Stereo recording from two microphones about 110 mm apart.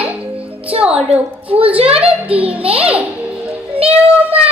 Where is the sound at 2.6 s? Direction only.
60° right (ahead or behind).